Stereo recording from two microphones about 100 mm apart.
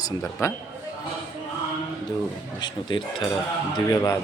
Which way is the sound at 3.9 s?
30° left (ahead or behind).